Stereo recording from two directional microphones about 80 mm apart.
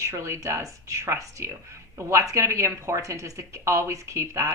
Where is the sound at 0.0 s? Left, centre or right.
Right.